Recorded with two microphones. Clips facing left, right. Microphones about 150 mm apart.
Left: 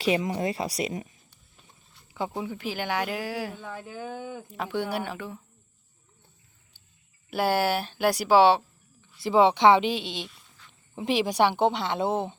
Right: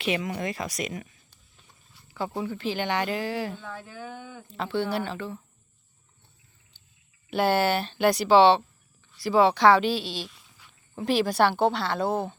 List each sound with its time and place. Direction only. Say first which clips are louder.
0.0 s speech: left 3 dB; 30° left (ahead or behind)
2.1 s speech: right 1 dB; 15° left (ahead or behind)
7.3 s speech: right 1 dB; 10° left (ahead or behind)
9.2 s a woman's voice: even; 20° left (ahead or behind)
10.2 s a sound: even; centre (ahead or behind)
10.9 s a woman's voice: right 1 dB; 15° left (ahead or behind)